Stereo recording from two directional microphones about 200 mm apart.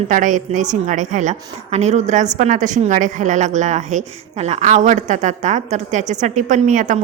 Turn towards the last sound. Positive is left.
turn(degrees=-40)  # may be behind; listen again after turning